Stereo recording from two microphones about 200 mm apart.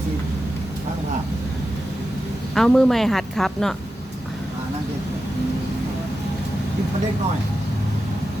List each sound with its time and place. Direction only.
2.6 s a woman's voice: centre (ahead or behind)